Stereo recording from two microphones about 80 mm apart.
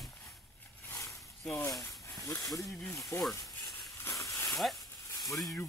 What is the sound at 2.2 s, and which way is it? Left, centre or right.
Speech, left.